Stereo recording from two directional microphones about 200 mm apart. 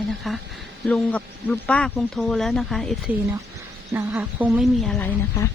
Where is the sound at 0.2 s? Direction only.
Centre (ahead or behind).